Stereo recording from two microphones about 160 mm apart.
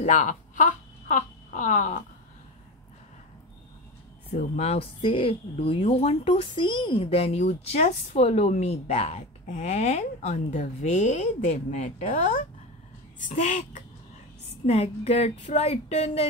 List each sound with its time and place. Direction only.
0.0 s speech: 50° left (ahead or behind)
4.3 s speech: 45° left (ahead or behind)
14.7 s speech: 40° left (ahead or behind)